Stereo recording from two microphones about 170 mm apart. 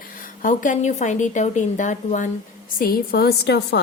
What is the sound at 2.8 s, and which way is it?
A woman's voice, 65° left (ahead or behind).